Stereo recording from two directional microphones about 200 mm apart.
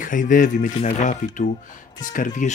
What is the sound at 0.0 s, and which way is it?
Speech, 40° left (ahead or behind).